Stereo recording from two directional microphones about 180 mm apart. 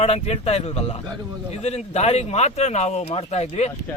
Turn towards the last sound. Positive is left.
turn(degrees=35)  # may be behind; listen again after turning